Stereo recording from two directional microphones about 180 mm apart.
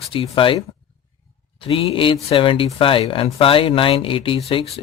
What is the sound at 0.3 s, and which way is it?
Speech, 30° left (ahead or behind).